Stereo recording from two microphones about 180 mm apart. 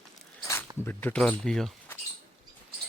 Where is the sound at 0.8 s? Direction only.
10° left (ahead or behind).